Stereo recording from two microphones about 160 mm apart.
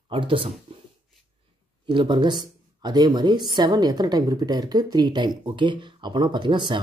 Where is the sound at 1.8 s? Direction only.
30° right (ahead or behind).